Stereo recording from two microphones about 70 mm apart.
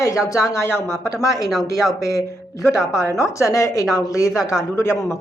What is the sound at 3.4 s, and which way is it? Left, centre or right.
A woman's voice, left.